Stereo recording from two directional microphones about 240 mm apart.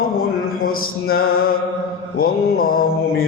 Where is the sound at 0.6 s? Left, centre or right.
Left.